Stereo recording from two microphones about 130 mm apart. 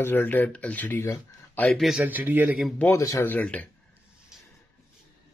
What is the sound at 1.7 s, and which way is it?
Speech, centre (ahead or behind).